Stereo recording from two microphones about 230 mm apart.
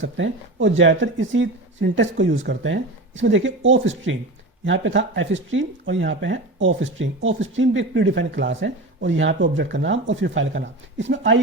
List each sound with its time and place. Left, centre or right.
0.0 s speech: right